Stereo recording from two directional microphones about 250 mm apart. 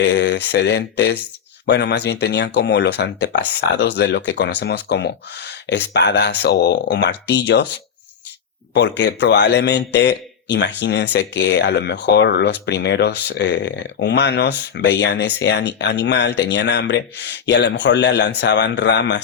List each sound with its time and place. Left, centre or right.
0.0 s speech: left
8.7 s speech: left